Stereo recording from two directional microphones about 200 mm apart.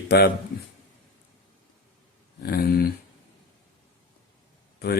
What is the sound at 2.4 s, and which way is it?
Speech, 50° left (ahead or behind).